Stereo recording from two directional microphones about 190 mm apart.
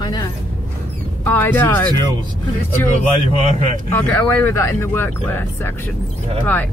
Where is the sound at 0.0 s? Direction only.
20° left (ahead or behind).